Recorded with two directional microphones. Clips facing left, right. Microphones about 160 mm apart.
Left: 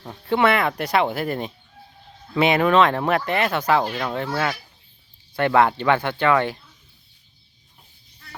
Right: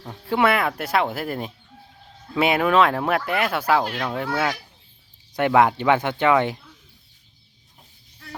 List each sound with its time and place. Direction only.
0.0 s speech: 5° right (ahead or behind)